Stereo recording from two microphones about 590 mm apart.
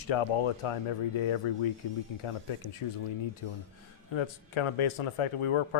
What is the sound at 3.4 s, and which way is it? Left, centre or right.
Speech, left.